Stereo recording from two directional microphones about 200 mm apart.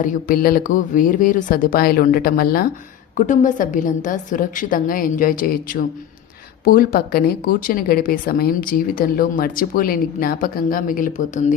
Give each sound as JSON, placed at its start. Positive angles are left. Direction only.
{"t": 0.0, "sound": "a woman's voice", "side_deg": 40}